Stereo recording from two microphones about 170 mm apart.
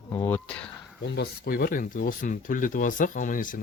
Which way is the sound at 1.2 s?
65° left (ahead or behind).